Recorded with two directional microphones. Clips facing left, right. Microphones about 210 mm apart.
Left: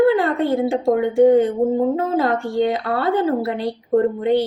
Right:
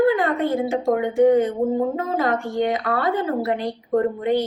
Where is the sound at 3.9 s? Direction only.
30° left (ahead or behind).